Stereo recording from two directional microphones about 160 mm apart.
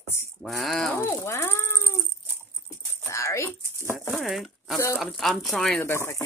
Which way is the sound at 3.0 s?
20° left (ahead or behind).